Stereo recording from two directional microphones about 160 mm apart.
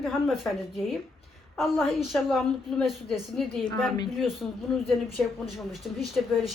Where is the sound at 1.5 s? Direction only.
Centre (ahead or behind).